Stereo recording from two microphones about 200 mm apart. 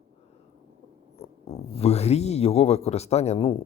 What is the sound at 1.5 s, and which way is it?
Speech, 30° left (ahead or behind).